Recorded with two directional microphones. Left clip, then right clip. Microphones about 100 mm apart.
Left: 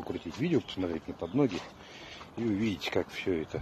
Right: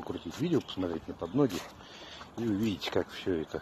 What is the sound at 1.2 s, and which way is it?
Speech, 5° left (ahead or behind).